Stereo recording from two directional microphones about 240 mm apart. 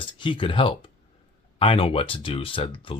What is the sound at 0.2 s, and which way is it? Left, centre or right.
Speech, left.